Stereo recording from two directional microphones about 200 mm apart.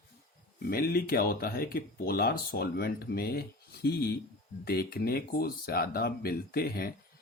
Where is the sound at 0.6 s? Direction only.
50° left (ahead or behind).